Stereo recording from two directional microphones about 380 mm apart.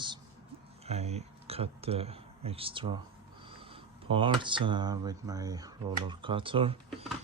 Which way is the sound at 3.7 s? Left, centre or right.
Centre.